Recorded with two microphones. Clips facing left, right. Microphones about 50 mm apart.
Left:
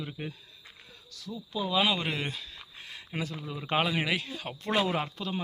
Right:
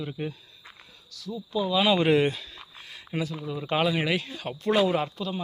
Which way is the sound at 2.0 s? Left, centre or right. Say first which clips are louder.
Right 12 dB; right.